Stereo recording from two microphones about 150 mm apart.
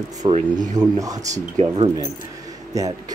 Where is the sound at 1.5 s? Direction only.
40° right (ahead or behind).